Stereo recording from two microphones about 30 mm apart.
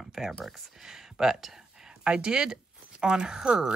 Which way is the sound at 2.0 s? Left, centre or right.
Right.